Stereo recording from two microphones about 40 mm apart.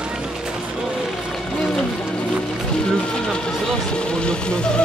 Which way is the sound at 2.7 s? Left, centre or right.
Centre.